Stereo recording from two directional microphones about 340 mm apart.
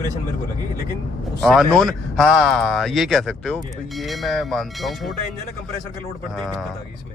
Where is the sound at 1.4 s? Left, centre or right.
Centre.